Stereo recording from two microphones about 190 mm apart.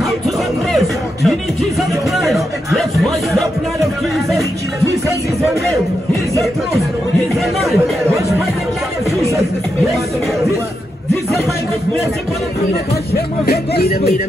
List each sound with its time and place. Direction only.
0.7 s music: centre (ahead or behind)
13.5 s speech: 55° left (ahead or behind)